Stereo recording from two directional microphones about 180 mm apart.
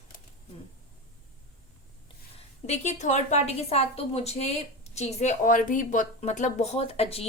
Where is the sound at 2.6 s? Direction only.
40° left (ahead or behind).